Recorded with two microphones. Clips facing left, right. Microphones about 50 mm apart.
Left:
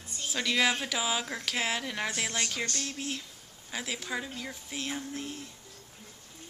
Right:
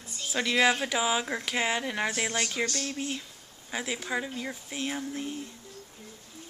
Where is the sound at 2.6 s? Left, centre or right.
Right.